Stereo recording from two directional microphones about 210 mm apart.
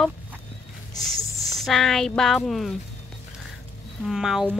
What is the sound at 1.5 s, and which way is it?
Speech, centre (ahead or behind).